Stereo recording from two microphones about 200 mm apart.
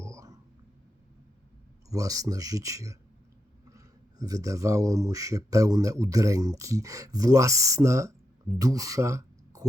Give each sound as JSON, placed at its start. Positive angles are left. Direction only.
{"t": 0.0, "sound": "whispering", "side_deg": -15}
{"t": 1.9, "sound": "speech", "side_deg": -15}